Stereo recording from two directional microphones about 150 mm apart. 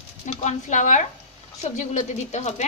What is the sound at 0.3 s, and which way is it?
A woman's voice, 50° left (ahead or behind).